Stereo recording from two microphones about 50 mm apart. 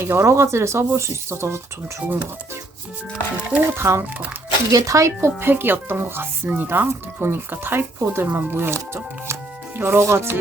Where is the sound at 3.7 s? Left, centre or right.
Right.